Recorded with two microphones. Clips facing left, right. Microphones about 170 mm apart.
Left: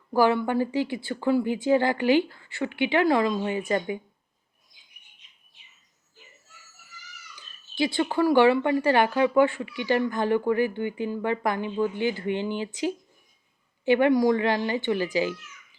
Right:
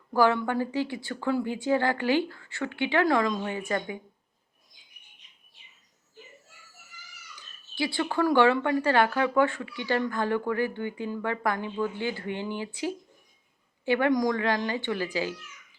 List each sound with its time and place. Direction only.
0.1 s speech: 15° left (ahead or behind)
7.8 s speech: 20° left (ahead or behind)